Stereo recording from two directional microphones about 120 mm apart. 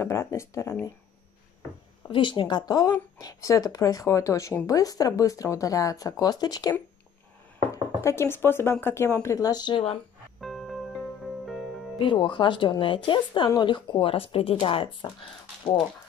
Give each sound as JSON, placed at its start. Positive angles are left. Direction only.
{"t": 0.0, "sound": "speech", "side_deg": 20}
{"t": 2.0, "sound": "speech", "side_deg": 45}
{"t": 10.4, "sound": "music", "side_deg": 0}
{"t": 12.0, "sound": "speech", "side_deg": 45}